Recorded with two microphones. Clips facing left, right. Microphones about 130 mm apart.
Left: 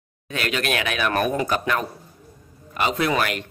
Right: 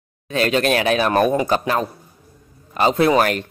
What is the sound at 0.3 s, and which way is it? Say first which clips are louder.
Speech: right 7 dB; 35° right (ahead or behind).